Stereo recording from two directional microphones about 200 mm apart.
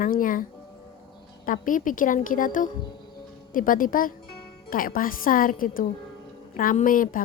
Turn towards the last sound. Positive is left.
turn(degrees=45)  # may be behind; listen again after turning